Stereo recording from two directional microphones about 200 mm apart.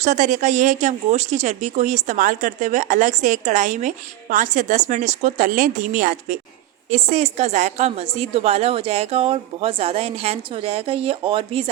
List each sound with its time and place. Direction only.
0.0 s speech: 35° right (ahead or behind)